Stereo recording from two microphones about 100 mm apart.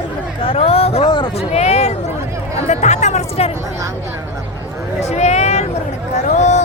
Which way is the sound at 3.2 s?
90° left.